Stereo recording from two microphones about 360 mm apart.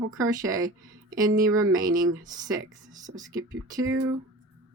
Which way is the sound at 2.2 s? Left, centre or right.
Centre.